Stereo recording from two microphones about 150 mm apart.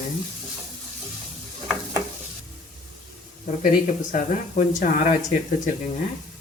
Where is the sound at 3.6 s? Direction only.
55° left (ahead or behind).